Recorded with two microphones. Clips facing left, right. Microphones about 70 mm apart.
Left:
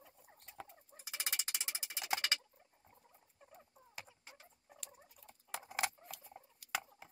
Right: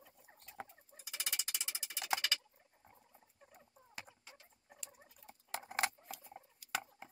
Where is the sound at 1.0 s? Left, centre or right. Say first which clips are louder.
Left 1 dB; left.